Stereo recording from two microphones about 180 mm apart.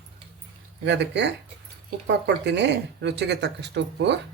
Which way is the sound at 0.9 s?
75° right (ahead or behind).